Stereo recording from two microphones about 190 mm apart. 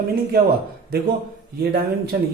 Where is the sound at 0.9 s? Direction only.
55° right (ahead or behind).